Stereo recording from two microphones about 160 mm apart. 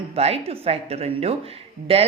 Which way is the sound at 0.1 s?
40° right (ahead or behind).